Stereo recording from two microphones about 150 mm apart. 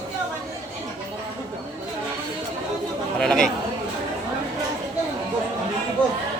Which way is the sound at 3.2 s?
5° left (ahead or behind).